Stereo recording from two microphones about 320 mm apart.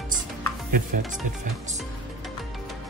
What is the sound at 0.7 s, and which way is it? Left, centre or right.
Speech, right.